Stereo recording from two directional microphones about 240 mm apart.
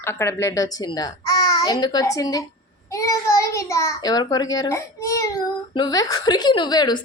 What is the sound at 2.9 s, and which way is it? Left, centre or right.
Child singing, centre.